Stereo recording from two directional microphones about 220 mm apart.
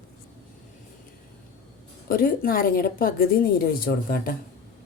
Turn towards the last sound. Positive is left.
turn(degrees=40)  # may be behind; listen again after turning